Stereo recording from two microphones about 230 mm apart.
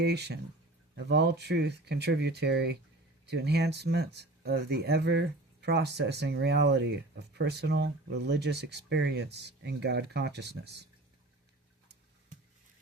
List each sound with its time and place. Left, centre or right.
0.0 s speech: right